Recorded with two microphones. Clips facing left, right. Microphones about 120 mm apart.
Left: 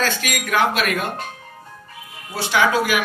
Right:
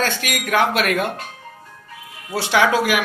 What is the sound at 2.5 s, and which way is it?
Speech, 65° right (ahead or behind).